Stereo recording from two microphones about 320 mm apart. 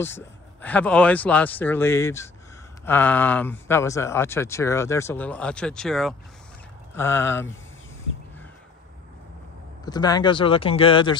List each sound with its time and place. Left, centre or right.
0.0 s speech: centre
9.8 s speech: centre